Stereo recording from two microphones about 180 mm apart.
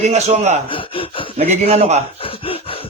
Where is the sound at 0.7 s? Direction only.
30° left (ahead or behind).